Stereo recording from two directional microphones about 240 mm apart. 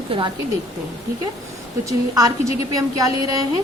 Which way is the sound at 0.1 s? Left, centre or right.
Right.